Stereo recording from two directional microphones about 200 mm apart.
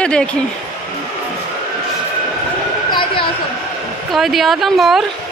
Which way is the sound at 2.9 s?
25° left (ahead or behind).